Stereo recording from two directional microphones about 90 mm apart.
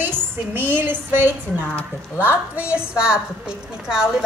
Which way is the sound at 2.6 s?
10° right (ahead or behind).